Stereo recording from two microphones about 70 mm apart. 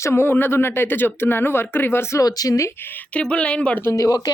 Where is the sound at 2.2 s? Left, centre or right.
Left.